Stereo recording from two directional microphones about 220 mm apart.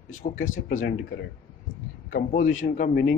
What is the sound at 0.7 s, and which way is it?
A man's voice, 40° left (ahead or behind).